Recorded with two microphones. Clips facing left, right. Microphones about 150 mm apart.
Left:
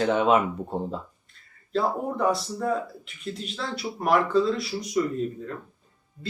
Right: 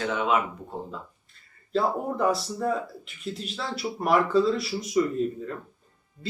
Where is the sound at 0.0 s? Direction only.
35° left (ahead or behind).